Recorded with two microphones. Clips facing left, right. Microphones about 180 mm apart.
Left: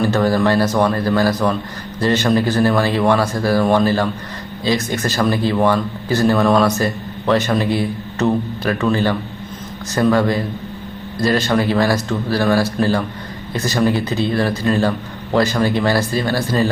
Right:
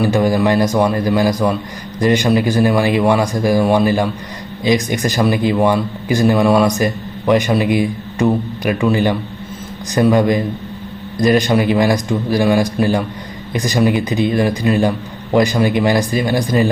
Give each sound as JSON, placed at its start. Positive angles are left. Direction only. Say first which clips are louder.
{"t": 0.0, "sound": "speech", "louder": "right 1 dB", "side_deg": -10}